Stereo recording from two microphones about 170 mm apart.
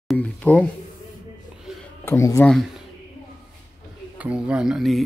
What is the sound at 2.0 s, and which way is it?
Speech, 15° left (ahead or behind).